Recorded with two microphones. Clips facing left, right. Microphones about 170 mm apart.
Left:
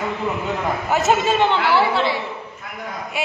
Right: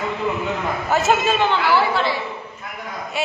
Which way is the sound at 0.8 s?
20° left (ahead or behind).